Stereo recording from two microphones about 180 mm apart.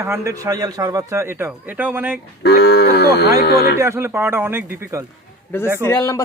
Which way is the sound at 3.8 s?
15° right (ahead or behind).